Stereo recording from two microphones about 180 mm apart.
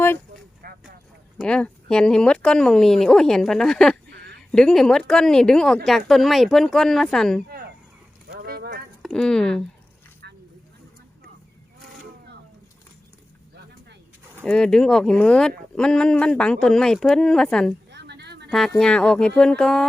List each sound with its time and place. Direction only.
0.6 s vehicle: 55° right (ahead or behind)
1.4 s speech: 5° left (ahead or behind)
8.3 s a sound: 60° right (ahead or behind)
9.0 s speech: centre (ahead or behind)
14.4 s speech: 5° left (ahead or behind)
17.9 s a sound: 65° right (ahead or behind)
18.4 s speech: centre (ahead or behind)